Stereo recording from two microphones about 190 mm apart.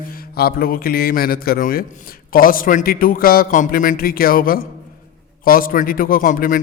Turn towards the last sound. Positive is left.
turn(degrees=45)  # may be behind; listen again after turning